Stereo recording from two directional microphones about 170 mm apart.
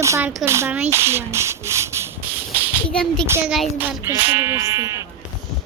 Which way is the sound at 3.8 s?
10° right (ahead or behind).